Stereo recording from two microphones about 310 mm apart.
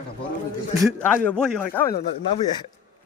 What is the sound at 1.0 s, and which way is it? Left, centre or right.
A man's voice, centre.